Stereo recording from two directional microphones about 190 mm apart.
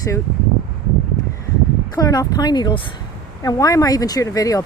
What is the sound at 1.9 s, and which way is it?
Speech, 20° left (ahead or behind).